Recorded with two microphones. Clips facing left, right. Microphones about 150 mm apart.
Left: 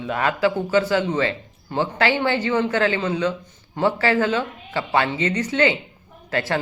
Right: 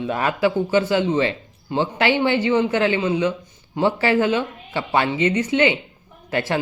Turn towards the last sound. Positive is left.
turn(degrees=-15)  # may be behind; listen again after turning